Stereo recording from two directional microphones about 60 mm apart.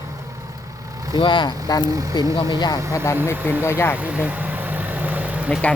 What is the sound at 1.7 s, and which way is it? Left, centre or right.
Speech, left.